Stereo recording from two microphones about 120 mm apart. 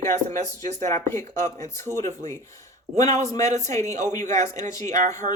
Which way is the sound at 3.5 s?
75° right (ahead or behind).